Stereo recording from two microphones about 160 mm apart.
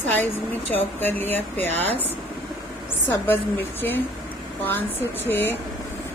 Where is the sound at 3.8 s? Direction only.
15° left (ahead or behind).